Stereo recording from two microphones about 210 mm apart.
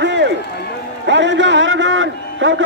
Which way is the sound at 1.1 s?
60° right (ahead or behind).